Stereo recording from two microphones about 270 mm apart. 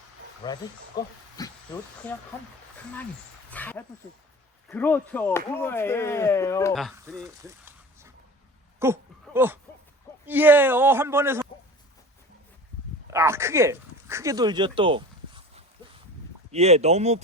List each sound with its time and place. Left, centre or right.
0.4 s speech: centre
1.4 s a sound: centre
2.3 s speech: centre
3.5 s speech: centre
7.2 s a sound: centre
10.2 s a man's voice: centre
13.1 s speech: centre